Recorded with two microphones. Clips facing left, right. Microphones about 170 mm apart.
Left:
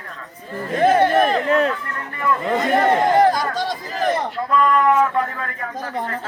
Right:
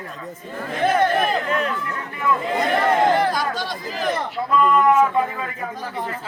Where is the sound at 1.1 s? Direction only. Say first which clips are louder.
Left 5 dB; 35° left (ahead or behind).